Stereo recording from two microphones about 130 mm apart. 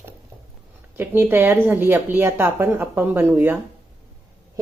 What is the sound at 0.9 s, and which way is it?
A woman's voice, 15° right (ahead or behind).